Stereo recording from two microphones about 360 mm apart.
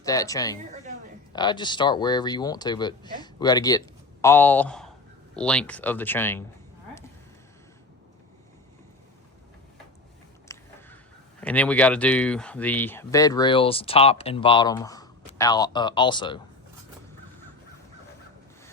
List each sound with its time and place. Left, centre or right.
0.0 s speech: centre
10.5 s a sound: centre
11.3 s speech: centre